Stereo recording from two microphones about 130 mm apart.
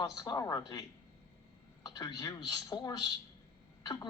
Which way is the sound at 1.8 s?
30° left (ahead or behind).